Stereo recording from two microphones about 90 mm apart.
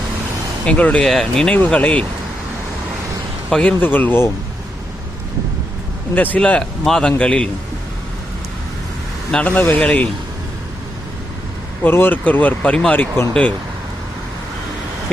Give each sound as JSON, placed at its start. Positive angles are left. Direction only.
{"t": 0.6, "sound": "speech", "side_deg": 15}
{"t": 1.0, "sound": "speech", "side_deg": 5}
{"t": 1.5, "sound": "a man's voice", "side_deg": 15}
{"t": 3.5, "sound": "speech", "side_deg": 10}
{"t": 6.1, "sound": "a man's voice", "side_deg": 15}
{"t": 9.3, "sound": "a man's voice", "side_deg": 10}
{"t": 11.8, "sound": "speech", "side_deg": 25}